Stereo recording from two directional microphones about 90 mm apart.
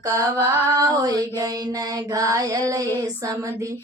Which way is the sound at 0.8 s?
45° right (ahead or behind).